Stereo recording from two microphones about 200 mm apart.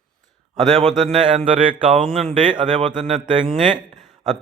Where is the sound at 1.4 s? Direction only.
25° right (ahead or behind).